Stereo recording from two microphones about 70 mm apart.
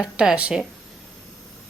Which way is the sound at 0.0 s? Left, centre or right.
Centre.